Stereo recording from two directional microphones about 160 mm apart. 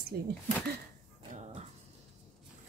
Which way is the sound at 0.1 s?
70° right (ahead or behind).